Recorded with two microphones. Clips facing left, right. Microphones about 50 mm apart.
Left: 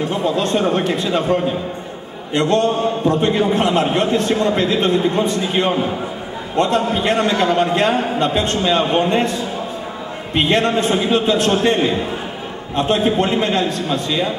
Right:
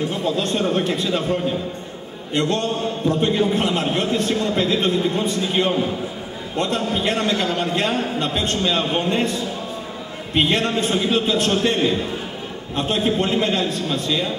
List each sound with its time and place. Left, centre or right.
0.1 s a man's voice: centre
2.3 s a man's voice: centre